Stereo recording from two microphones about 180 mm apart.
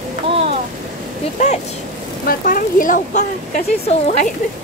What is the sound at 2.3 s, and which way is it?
Speech, 50° left (ahead or behind).